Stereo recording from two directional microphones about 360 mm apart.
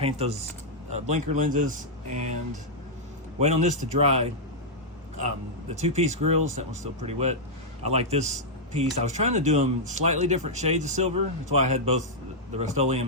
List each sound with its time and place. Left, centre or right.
0.0 s speech: centre
5.2 s speech: centre